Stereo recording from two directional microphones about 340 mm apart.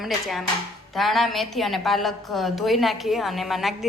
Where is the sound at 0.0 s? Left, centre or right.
Centre.